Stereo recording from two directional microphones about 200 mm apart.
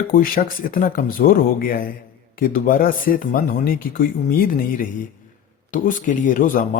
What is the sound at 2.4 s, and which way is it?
Speech, 45° left (ahead or behind).